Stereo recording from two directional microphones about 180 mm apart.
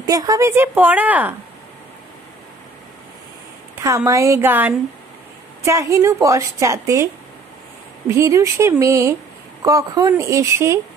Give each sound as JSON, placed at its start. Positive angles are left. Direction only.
{"t": 0.0, "sound": "a woman's voice", "side_deg": -20}
{"t": 3.8, "sound": "a woman's voice", "side_deg": -15}
{"t": 8.1, "sound": "a woman's voice", "side_deg": -15}